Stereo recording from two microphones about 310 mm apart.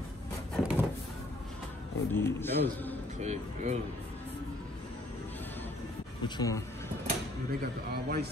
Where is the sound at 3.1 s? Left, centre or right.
Right.